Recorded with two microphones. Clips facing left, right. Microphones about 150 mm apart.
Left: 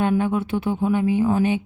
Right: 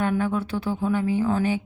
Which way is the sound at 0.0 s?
20° left (ahead or behind).